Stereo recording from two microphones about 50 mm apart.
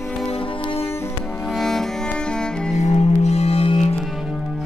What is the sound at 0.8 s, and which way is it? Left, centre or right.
Cello, left.